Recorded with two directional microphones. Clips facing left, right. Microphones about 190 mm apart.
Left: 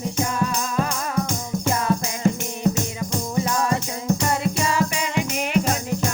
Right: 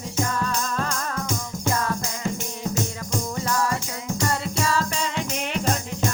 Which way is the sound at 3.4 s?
15° left (ahead or behind).